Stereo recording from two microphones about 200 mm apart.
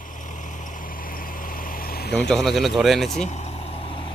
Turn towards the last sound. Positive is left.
turn(degrees=25)  # may be behind; listen again after turning